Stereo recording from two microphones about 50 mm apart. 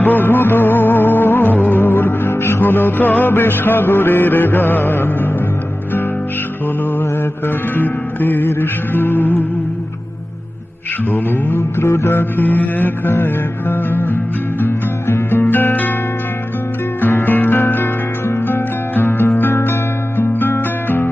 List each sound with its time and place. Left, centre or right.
0.0 s music: left
7.4 s music: left
11.1 s music: left
17.0 s music: left